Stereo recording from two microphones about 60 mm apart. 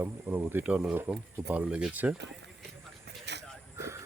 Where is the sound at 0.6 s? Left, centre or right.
Right.